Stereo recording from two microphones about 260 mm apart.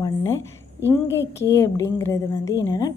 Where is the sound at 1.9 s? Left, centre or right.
Centre.